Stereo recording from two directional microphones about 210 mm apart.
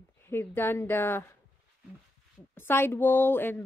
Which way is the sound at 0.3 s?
10° left (ahead or behind).